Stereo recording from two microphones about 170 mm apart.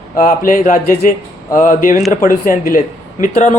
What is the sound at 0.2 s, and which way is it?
A man's voice, 50° left (ahead or behind).